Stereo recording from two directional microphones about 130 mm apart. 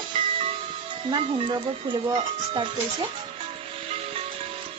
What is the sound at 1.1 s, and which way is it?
Speech, 35° right (ahead or behind).